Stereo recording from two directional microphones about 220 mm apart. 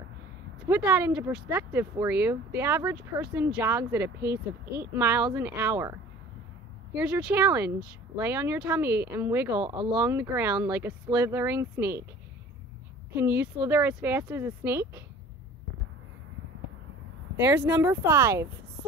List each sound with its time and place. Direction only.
0.7 s speech: 10° right (ahead or behind)
4.2 s speech: 45° right (ahead or behind)
4.9 s speech: 10° right (ahead or behind)
7.0 s speech: 5° right (ahead or behind)
13.6 s speech: 10° right (ahead or behind)
17.6 s speech: 10° right (ahead or behind)